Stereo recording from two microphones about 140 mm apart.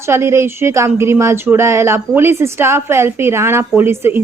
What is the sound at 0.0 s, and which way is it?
A woman's voice, 20° right (ahead or behind).